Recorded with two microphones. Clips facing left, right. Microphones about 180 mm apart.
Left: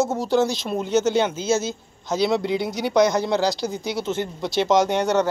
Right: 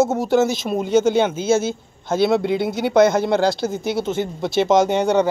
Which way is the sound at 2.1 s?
55° right (ahead or behind).